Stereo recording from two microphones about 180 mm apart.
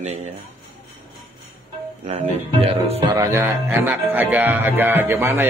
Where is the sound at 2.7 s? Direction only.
35° right (ahead or behind).